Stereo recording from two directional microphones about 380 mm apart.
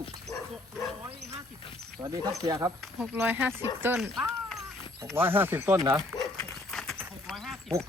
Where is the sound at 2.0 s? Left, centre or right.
Centre.